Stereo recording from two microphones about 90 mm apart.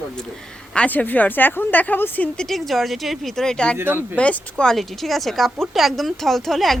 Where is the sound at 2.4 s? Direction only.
Centre (ahead or behind).